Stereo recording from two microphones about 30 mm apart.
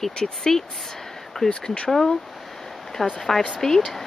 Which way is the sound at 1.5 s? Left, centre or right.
Left.